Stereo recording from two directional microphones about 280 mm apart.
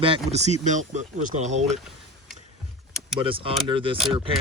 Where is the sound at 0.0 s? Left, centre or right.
Right.